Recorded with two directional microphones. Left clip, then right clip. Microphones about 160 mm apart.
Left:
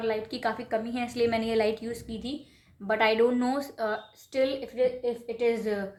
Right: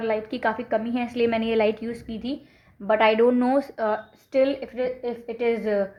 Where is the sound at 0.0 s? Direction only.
45° right (ahead or behind).